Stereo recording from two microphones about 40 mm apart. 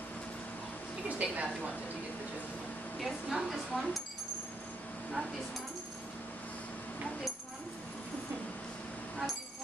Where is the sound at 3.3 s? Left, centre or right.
Centre.